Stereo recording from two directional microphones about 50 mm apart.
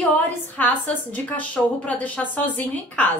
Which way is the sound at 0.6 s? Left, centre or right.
Left.